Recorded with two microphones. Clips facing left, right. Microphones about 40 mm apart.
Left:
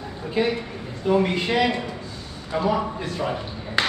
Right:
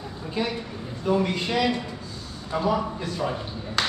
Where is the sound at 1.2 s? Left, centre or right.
Left.